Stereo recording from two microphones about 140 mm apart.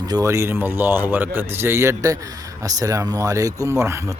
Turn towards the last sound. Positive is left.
turn(degrees=-20)  # may be behind; listen again after turning